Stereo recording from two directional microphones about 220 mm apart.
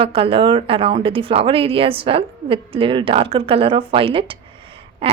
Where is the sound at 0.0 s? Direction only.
25° right (ahead or behind).